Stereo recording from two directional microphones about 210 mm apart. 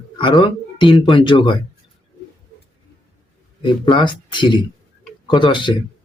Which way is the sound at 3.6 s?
25° left (ahead or behind).